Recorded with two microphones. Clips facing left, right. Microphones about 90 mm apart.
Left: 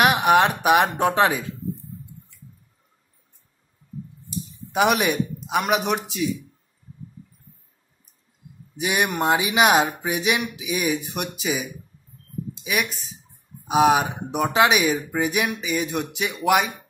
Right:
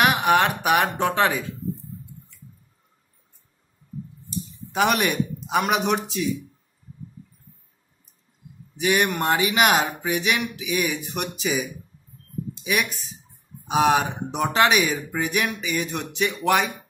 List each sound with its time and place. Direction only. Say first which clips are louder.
0.0 s speech: left 2 dB; 15° left (ahead or behind)
4.3 s a sound: left 1 dB; 10° left (ahead or behind)
5.5 s speech: even; centre (ahead or behind)
8.7 s speech: right 1 dB; 15° left (ahead or behind)
12.6 s speech: right 1 dB; centre (ahead or behind)